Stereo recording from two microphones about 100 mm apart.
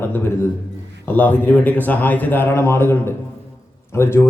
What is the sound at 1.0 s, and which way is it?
Speech, 15° left (ahead or behind).